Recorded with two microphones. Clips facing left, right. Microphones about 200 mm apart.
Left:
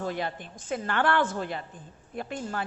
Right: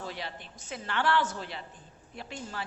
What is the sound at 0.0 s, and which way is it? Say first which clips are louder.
A woman's voice: left 8 dB; 50° left (ahead or behind).